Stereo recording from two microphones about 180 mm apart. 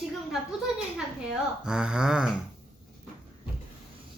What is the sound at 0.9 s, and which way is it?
Speech, 5° right (ahead or behind).